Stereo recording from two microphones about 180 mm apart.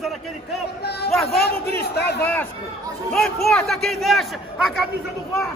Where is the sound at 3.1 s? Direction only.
Centre (ahead or behind).